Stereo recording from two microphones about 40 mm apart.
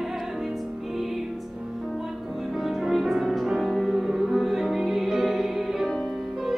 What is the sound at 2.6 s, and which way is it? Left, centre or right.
Music, centre.